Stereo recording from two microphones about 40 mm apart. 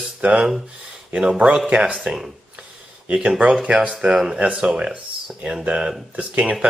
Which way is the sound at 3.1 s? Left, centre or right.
Right.